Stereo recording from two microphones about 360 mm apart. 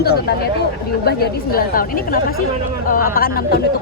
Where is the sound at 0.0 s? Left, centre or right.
Left.